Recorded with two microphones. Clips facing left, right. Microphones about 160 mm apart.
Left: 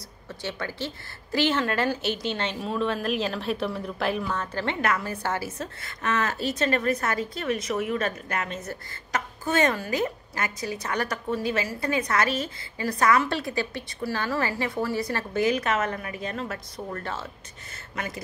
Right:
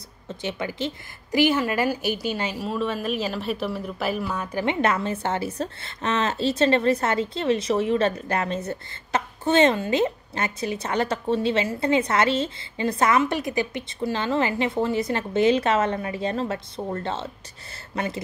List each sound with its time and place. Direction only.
0.3 s a woman's voice: 20° right (ahead or behind)
4.8 s a woman's voice: 25° right (ahead or behind)